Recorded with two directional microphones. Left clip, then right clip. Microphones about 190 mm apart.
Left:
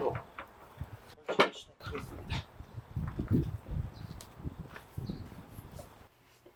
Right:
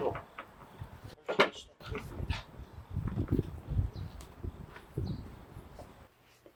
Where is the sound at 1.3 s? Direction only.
Centre (ahead or behind).